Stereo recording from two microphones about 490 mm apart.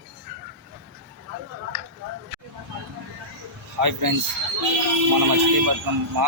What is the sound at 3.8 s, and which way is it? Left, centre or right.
Speech, right.